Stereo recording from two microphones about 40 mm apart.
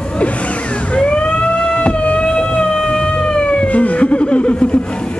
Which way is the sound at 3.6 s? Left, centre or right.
Left.